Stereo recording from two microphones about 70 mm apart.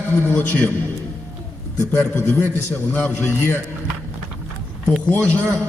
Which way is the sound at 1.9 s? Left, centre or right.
Left.